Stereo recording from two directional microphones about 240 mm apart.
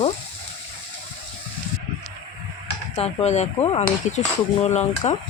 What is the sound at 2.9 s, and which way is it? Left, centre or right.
Speech, left.